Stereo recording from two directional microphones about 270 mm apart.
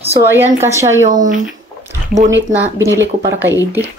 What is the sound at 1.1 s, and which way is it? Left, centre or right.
Speech, right.